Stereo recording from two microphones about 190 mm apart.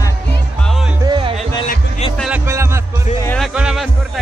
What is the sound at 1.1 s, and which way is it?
Music, 25° right (ahead or behind).